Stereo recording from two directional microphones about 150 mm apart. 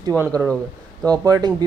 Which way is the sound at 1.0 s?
25° right (ahead or behind).